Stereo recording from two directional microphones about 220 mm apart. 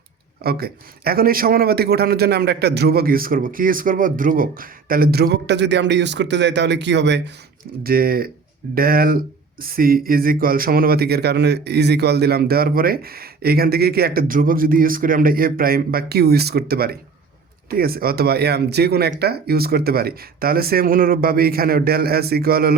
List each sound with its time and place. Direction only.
0.4 s speech: 45° right (ahead or behind)